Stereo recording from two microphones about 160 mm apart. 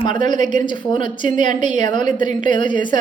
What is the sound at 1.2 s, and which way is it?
Speech, 50° right (ahead or behind).